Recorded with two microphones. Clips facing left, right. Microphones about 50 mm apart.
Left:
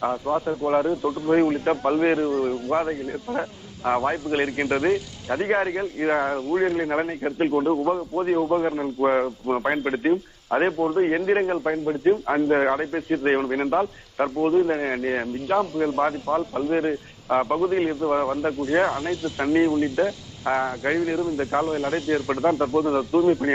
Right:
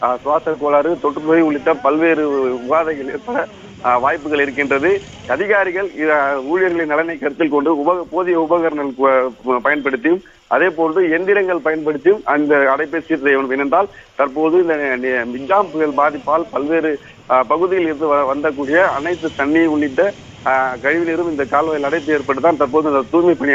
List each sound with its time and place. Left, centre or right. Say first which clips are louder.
0.0 s a man's voice: right 8 dB; right